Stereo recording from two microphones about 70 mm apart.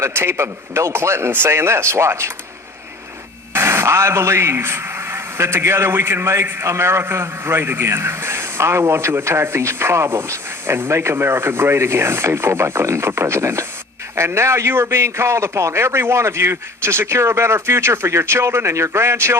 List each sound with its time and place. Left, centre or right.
0.0 s speech: right
3.5 s speech: right